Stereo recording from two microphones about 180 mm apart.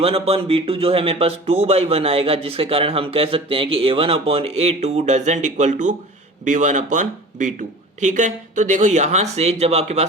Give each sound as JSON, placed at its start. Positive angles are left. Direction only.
{"t": 0.0, "sound": "speech", "side_deg": -35}